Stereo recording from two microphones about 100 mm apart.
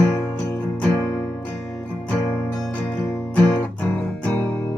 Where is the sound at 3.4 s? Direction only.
15° left (ahead or behind).